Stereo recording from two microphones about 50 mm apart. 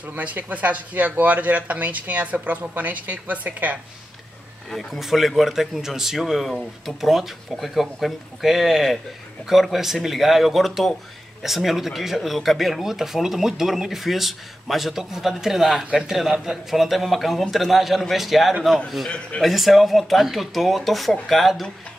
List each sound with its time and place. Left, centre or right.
0.0 s speech: right
4.6 s speech: centre
19.0 s speech: centre
19.4 s speech: centre